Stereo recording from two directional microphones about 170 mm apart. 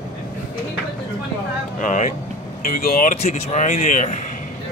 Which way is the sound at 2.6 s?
60° left (ahead or behind).